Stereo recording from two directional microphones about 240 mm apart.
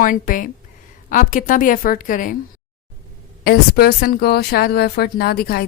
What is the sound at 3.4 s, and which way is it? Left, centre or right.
Speech, left.